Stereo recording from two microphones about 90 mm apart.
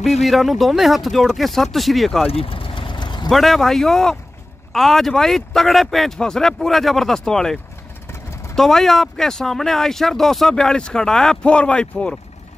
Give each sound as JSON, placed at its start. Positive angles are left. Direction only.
{"t": 0.0, "sound": "speech", "side_deg": 0}
{"t": 2.2, "sound": "vehicle", "side_deg": 90}
{"t": 3.3, "sound": "speech", "side_deg": 0}
{"t": 8.1, "sound": "vehicle", "side_deg": 30}
{"t": 8.5, "sound": "speech", "side_deg": 5}